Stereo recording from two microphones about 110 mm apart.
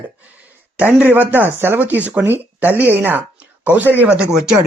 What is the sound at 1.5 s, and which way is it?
Speech, 20° right (ahead or behind).